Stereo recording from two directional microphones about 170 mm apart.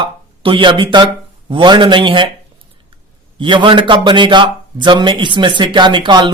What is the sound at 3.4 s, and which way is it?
A man's voice, 30° right (ahead or behind).